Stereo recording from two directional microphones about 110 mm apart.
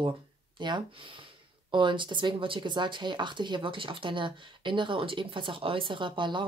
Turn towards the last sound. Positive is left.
turn(degrees=-45)  # may be behind; listen again after turning